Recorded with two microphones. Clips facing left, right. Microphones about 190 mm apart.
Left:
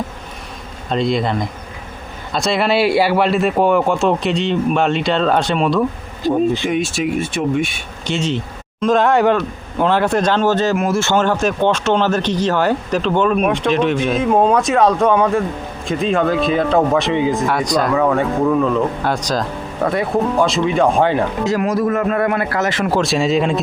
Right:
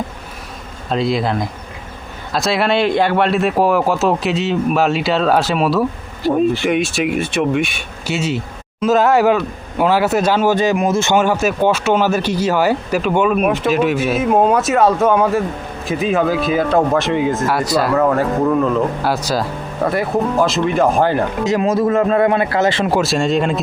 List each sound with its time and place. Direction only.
0.9 s speech: centre (ahead or behind)
6.2 s speech: 20° left (ahead or behind)
6.7 s speech: 70° right (ahead or behind)
8.0 s speech: 5° right (ahead or behind)
21.4 s a man's voice: 20° right (ahead or behind)
22.9 s speech: 5° right (ahead or behind)